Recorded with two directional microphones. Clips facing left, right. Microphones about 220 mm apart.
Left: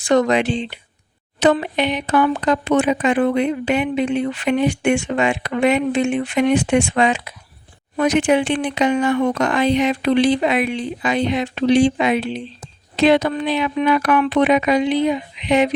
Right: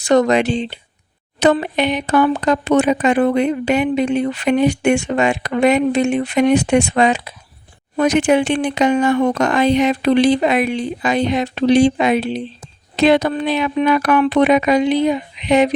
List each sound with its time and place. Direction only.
0.0 s speech: 40° right (ahead or behind)